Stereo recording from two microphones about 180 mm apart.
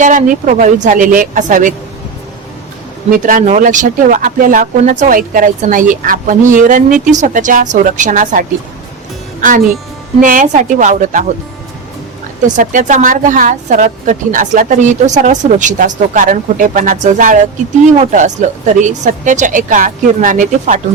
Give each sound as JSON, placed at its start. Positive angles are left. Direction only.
{"t": 0.0, "sound": "a woman's voice", "side_deg": -45}
{"t": 3.2, "sound": "a woman's voice", "side_deg": -45}
{"t": 10.2, "sound": "a woman's voice", "side_deg": -45}
{"t": 12.4, "sound": "a woman's voice", "side_deg": -45}